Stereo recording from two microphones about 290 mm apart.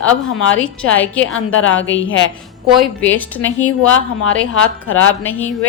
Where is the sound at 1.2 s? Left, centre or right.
Left.